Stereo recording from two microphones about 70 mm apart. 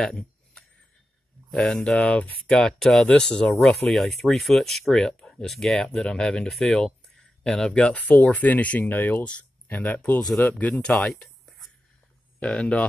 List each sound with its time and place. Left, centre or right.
0.0 s a sound: centre
1.5 s speech: centre
10.2 s speech: centre